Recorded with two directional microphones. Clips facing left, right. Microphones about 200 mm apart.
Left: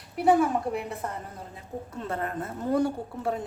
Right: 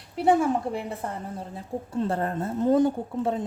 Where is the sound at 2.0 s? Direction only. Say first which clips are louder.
Right 4 dB; 30° right (ahead or behind).